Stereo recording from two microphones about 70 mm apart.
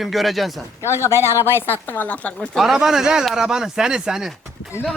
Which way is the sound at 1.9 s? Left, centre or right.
Left.